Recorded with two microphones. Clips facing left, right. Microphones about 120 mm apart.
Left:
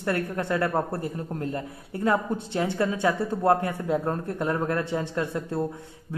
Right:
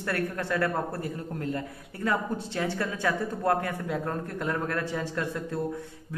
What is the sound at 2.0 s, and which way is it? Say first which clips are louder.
Speech: left 4 dB; 20° left (ahead or behind).